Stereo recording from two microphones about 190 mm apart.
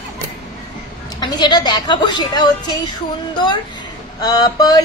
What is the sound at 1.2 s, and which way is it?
A man's voice, 20° left (ahead or behind).